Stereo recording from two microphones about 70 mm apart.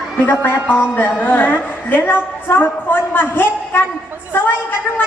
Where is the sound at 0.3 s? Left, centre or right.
Left.